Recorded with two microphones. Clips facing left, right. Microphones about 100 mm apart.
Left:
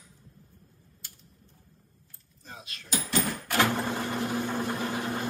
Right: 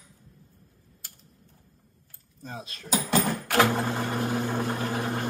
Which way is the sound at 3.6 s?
15° right (ahead or behind).